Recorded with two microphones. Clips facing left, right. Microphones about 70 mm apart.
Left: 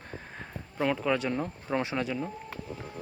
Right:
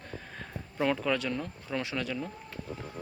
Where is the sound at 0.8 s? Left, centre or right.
Centre.